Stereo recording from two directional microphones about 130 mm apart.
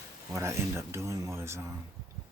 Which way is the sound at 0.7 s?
20° right (ahead or behind).